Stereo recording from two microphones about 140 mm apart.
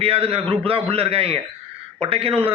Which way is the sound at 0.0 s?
45° right (ahead or behind).